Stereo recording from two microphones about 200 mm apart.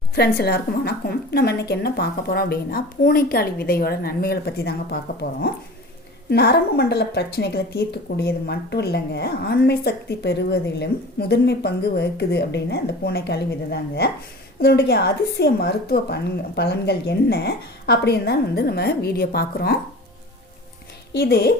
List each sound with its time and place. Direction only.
0.2 s a woman's voice: 55° left (ahead or behind)
6.3 s a woman's voice: 55° left (ahead or behind)
21.1 s speech: 50° left (ahead or behind)